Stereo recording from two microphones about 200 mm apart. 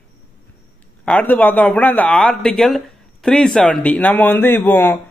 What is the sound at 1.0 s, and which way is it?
Speech, 10° left (ahead or behind).